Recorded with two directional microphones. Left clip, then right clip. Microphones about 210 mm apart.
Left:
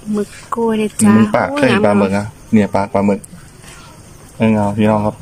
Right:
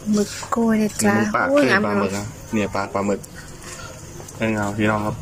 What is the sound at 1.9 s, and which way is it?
Speech, 45° left (ahead or behind).